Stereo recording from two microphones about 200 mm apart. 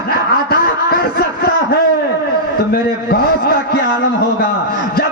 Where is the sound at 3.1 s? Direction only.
50° left (ahead or behind).